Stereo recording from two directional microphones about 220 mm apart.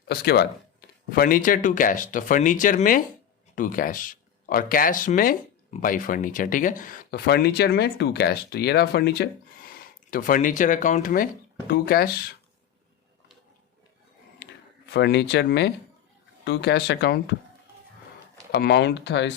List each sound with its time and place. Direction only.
0.1 s speech: 45° left (ahead or behind)
14.9 s speech: 50° left (ahead or behind)
18.5 s speech: 50° left (ahead or behind)